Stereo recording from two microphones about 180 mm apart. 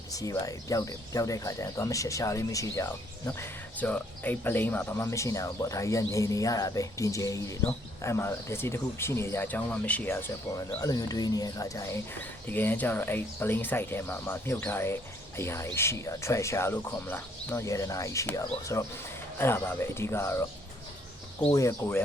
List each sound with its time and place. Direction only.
0.1 s speech: 20° left (ahead or behind)
21.5 s speech: 15° left (ahead or behind)